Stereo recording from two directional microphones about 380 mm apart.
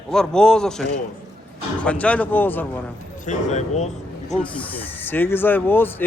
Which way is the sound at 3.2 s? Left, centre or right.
Centre.